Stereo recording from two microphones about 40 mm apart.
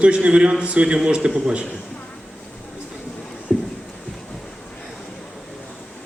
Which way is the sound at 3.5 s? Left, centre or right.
Centre.